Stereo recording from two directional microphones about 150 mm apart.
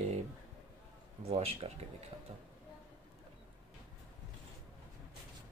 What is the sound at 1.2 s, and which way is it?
Speech, 40° right (ahead or behind).